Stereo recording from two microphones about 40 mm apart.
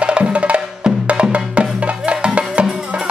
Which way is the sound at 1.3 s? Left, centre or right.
Right.